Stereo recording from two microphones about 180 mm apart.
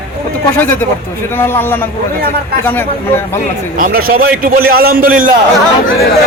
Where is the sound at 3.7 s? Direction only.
50° right (ahead or behind).